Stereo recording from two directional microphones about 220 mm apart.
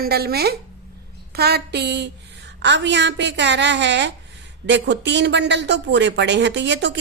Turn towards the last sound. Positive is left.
turn(degrees=-50)  # may be behind; listen again after turning